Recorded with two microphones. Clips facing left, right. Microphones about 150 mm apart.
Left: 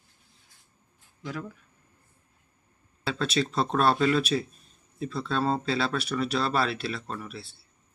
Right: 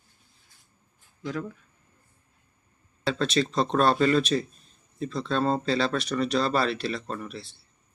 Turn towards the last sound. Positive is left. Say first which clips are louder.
# right 2 dB
turn(degrees=5)  # may be behind; listen again after turning